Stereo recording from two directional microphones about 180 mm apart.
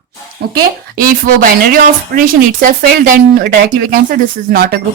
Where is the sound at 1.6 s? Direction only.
55° right (ahead or behind).